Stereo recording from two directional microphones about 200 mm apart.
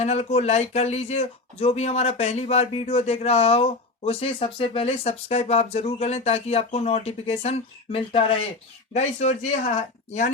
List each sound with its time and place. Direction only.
0.0 s speech: 30° left (ahead or behind)